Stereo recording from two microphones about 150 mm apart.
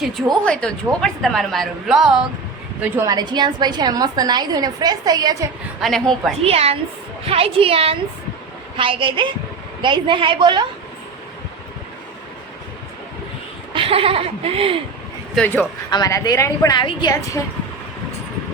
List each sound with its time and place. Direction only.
0.0 s a woman's voice: centre (ahead or behind)
3.1 s a woman's voice: 30° right (ahead or behind)
5.8 s a woman's voice: centre (ahead or behind)
6.4 s a woman's voice: 40° right (ahead or behind)
13.7 s speech: 40° right (ahead or behind)
15.4 s a man's voice: 10° left (ahead or behind)
15.9 s a woman's voice: 25° left (ahead or behind)